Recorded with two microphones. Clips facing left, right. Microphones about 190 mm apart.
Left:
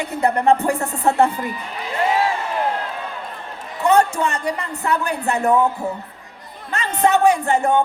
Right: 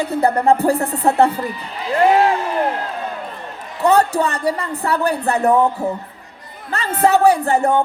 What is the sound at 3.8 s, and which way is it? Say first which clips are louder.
Speech: right 2 dB; 35° right (ahead or behind).